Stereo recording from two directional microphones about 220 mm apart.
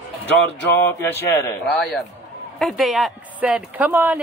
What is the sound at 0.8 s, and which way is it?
Speech, 10° left (ahead or behind).